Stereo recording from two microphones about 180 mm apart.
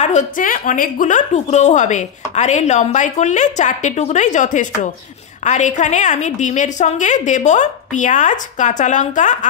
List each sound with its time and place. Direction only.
0.0 s a woman's voice: 40° left (ahead or behind)